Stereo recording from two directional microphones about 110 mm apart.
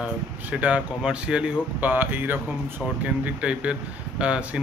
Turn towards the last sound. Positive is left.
turn(degrees=-10)  # may be behind; listen again after turning